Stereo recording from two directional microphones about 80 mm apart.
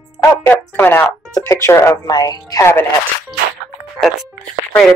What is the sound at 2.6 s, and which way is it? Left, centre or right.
Speech, left.